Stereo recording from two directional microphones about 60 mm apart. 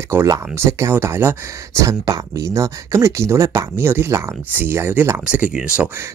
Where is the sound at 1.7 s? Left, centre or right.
Right.